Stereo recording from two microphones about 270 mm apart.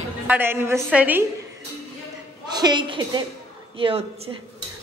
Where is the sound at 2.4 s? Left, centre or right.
Centre.